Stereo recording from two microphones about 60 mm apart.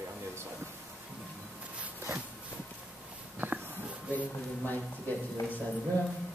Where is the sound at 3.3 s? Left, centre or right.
Right.